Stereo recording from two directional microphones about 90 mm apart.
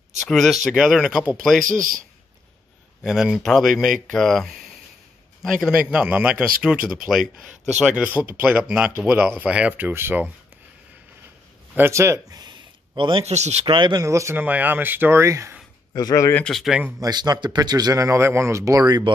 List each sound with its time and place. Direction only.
0.3 s speech: centre (ahead or behind)
3.0 s speech: 5° right (ahead or behind)
5.8 s speech: 10° right (ahead or behind); by 10.3 s 25° right (ahead or behind)
11.7 s speech: 30° right (ahead or behind)
12.3 s a sound: 50° right (ahead or behind)
13.7 s speech: 60° right (ahead or behind)
14.0 s speech: 35° right (ahead or behind)
14.3 s speech: 20° right (ahead or behind)
15.9 s speech: 45° left (ahead or behind)
16.4 s speech: 5° left (ahead or behind)
17.0 s speech: 50° right (ahead or behind)